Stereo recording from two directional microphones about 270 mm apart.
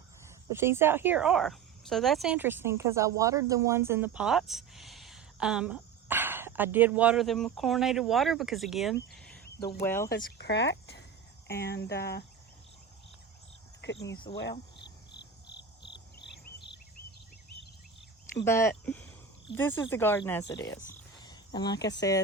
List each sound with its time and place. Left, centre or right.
0.5 s speech: centre
10.3 s speech: left
14.5 s cricket: centre
18.4 s speech: centre
21.2 s a sound: centre
21.8 s speech: centre